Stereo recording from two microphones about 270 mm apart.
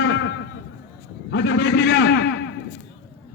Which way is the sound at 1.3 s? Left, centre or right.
Left.